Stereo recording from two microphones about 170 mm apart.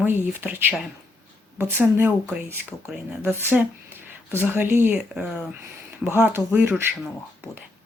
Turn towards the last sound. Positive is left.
turn(degrees=-10)  # may be behind; listen again after turning